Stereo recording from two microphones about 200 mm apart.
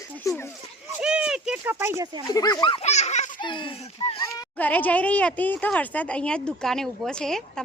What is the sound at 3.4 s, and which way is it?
Speech, 25° left (ahead or behind).